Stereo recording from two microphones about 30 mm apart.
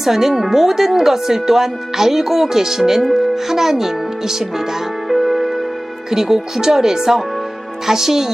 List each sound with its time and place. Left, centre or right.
0.0 s speech: centre
5.0 s music: centre
6.1 s speech: centre